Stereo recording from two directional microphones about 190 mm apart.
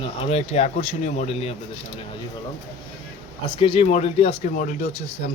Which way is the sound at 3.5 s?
25° left (ahead or behind).